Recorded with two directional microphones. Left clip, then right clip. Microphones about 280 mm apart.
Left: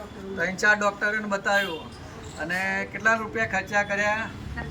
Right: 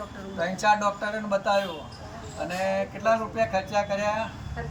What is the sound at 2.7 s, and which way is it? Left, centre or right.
Speech, left.